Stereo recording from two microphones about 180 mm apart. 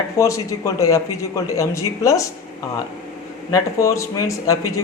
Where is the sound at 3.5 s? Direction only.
15° left (ahead or behind).